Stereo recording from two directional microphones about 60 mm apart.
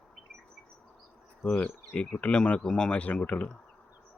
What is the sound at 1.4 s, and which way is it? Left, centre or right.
Speech, centre.